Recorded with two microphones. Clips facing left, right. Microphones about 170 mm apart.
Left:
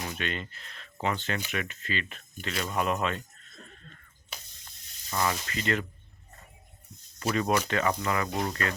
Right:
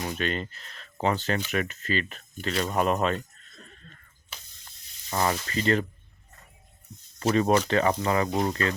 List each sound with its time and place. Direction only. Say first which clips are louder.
0.1 s speech: right 5 dB; 40° right (ahead or behind)
5.1 s speech: right 3 dB; 35° right (ahead or behind)
7.3 s speech: right 5 dB; 35° right (ahead or behind)